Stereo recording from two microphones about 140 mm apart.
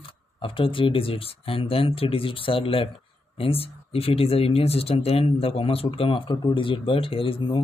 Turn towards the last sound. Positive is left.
turn(degrees=40)  # may be behind; listen again after turning